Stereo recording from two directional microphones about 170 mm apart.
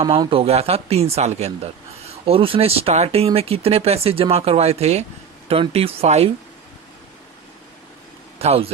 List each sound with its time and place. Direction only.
0.0 s speech: 30° right (ahead or behind)
8.4 s speech: 35° right (ahead or behind)